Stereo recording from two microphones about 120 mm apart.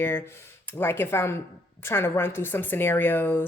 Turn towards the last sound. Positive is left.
turn(degrees=15)  # may be behind; listen again after turning